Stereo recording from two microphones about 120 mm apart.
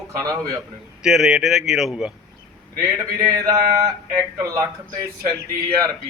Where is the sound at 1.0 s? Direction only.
5° right (ahead or behind).